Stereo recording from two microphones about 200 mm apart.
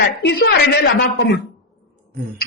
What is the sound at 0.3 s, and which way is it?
Speech, 55° left (ahead or behind).